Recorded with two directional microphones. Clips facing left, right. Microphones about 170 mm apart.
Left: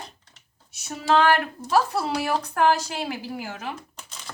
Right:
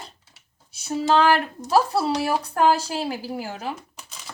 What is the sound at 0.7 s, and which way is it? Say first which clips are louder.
Speech: right 2 dB; 30° right (ahead or behind).